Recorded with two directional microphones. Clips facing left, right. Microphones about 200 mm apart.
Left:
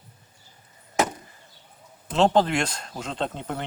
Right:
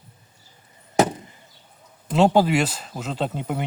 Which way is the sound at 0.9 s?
30° right (ahead or behind).